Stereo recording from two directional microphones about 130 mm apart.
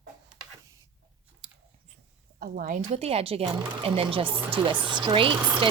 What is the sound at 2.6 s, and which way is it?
Speech, 85° right.